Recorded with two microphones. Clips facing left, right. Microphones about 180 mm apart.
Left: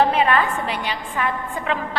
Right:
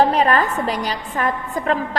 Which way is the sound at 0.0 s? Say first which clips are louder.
Right 2 dB; 40° right (ahead or behind).